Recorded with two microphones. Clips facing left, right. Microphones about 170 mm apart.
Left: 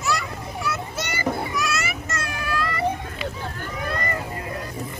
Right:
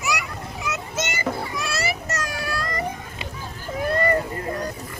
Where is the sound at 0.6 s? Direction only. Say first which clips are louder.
Right 2 dB; 20° right (ahead or behind); by 2.8 s 40° right (ahead or behind).